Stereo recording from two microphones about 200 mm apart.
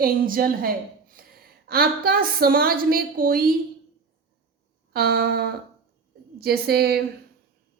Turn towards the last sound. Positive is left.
turn(degrees=-50)  # may be behind; listen again after turning